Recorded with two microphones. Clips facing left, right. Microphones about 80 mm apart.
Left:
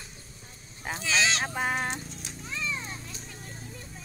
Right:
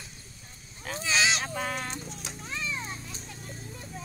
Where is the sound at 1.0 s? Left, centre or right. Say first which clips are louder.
Even; centre.